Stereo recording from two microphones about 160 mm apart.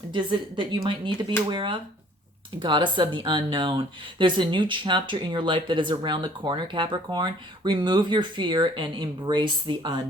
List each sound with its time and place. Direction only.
0.1 s speech: 30° right (ahead or behind)